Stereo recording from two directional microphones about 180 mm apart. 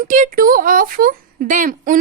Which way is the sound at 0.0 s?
45° right (ahead or behind).